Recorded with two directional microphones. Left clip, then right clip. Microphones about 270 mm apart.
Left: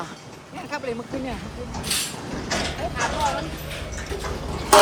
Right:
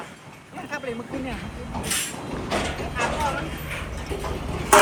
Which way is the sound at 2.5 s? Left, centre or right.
Left.